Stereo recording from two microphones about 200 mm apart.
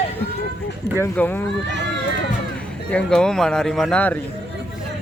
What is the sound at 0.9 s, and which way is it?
Speech, 10° left (ahead or behind).